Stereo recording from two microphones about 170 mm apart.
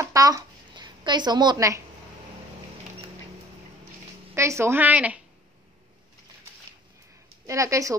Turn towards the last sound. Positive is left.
turn(degrees=-20)  # may be behind; listen again after turning